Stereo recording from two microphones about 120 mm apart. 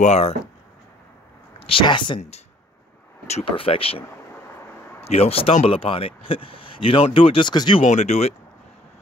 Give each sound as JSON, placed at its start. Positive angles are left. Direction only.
{"t": 0.0, "sound": "speech", "side_deg": 65}
{"t": 1.6, "sound": "speech", "side_deg": 45}
{"t": 2.1, "sound": "speech", "side_deg": 60}
{"t": 5.0, "sound": "speech", "side_deg": 60}
{"t": 7.8, "sound": "speech", "side_deg": 70}